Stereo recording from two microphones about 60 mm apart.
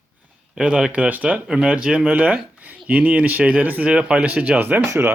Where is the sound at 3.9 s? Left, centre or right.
Centre.